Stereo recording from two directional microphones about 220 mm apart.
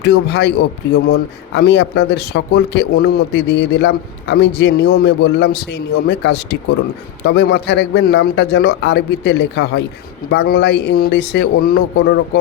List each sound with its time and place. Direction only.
0.0 s speech: 50° left (ahead or behind)